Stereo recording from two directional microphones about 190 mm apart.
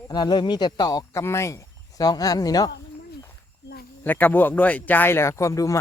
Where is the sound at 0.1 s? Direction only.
20° left (ahead or behind).